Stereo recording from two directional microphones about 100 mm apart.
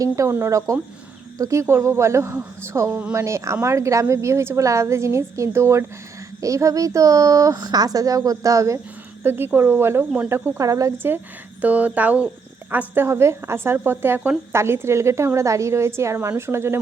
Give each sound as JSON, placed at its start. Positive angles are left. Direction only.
{"t": 0.0, "sound": "speech", "side_deg": -30}
{"t": 9.2, "sound": "speech", "side_deg": -20}
{"t": 10.6, "sound": "speech", "side_deg": -35}
{"t": 10.9, "sound": "speech", "side_deg": -20}